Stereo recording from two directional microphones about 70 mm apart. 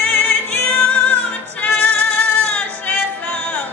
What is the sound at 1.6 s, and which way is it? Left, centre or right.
Music, left.